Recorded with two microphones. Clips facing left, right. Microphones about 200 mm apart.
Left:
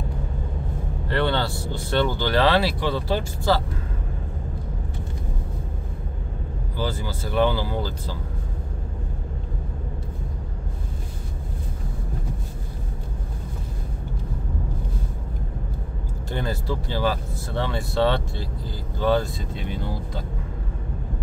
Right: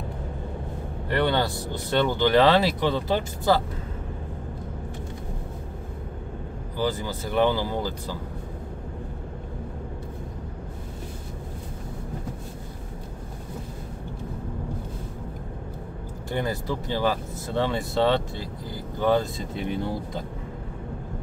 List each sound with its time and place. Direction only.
1.0 s speech: 15° right (ahead or behind)
6.8 s speech: 15° right (ahead or behind)
16.3 s speech: 15° right (ahead or behind)